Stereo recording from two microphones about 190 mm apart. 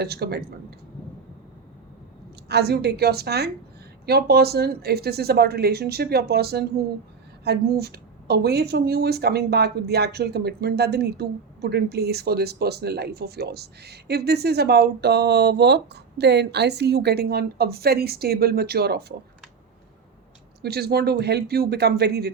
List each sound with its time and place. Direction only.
0.0 s a woman's voice: 55° right (ahead or behind)
2.5 s a woman's voice: 60° right (ahead or behind)
20.6 s a woman's voice: 55° right (ahead or behind)